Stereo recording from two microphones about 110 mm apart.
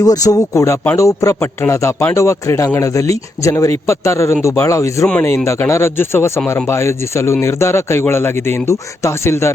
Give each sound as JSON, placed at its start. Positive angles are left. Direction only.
{"t": 0.0, "sound": "speech", "side_deg": 35}